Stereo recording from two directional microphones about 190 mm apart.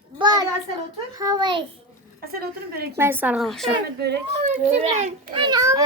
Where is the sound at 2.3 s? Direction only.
55° right (ahead or behind).